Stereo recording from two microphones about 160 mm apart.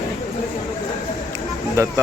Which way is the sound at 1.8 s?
15° right (ahead or behind).